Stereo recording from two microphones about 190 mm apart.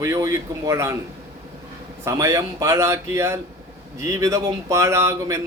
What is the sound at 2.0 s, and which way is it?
Speech, 15° right (ahead or behind).